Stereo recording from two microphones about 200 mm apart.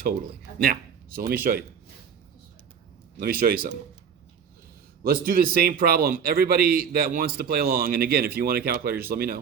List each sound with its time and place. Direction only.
0.6 s speech: 45° right (ahead or behind)
3.2 s a man's voice: 45° right (ahead or behind)
5.0 s a man's voice: 45° right (ahead or behind)